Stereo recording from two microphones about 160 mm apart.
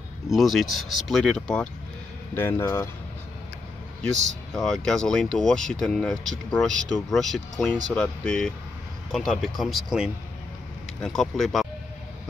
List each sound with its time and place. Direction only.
0.3 s speech: centre (ahead or behind)
2.3 s speech: 15° left (ahead or behind)
4.6 s speech: 5° left (ahead or behind)